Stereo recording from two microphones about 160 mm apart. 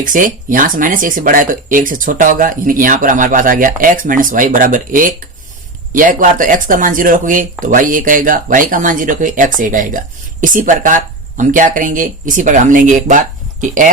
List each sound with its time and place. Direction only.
0.0 s speech: 60° right (ahead or behind)